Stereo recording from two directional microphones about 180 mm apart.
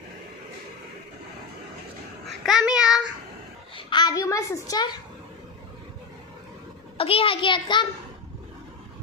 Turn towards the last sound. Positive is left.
turn(degrees=25)  # may be behind; listen again after turning